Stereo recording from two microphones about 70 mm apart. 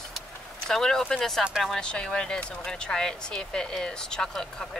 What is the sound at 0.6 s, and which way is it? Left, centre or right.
Speech, centre.